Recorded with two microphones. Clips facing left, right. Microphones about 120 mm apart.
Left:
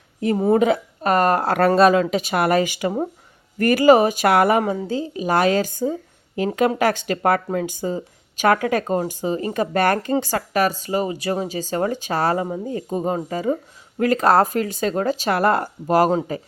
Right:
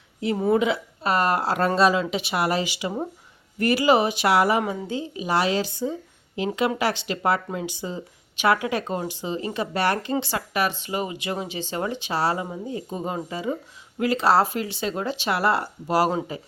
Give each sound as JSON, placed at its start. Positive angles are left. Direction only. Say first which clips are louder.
{"t": 0.2, "sound": "a woman's voice", "louder": "left 4 dB", "side_deg": 40}
{"t": 4.6, "sound": "a woman's voice", "louder": "left 5 dB", "side_deg": 40}